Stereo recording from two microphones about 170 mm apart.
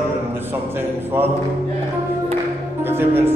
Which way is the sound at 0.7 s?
10° right (ahead or behind).